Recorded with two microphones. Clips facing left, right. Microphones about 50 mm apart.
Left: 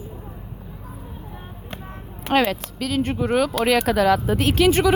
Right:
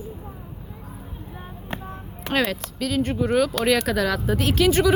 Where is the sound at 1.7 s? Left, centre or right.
Centre.